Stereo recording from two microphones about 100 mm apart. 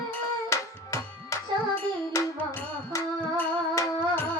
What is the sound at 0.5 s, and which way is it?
Music, 30° left (ahead or behind).